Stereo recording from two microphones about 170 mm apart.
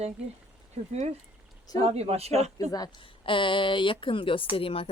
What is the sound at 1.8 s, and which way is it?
Speech, 35° right (ahead or behind).